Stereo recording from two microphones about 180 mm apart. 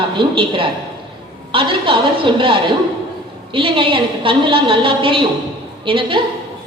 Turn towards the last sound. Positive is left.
turn(degrees=-30)  # may be behind; listen again after turning